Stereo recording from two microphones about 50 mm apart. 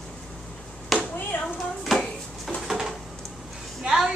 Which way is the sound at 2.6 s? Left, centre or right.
Centre.